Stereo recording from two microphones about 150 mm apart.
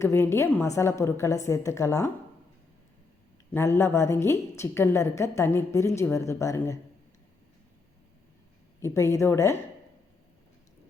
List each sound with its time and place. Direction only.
0.0 s a woman's voice: 15° left (ahead or behind)
3.5 s a woman's voice: 15° left (ahead or behind)
8.8 s a woman's voice: 20° left (ahead or behind)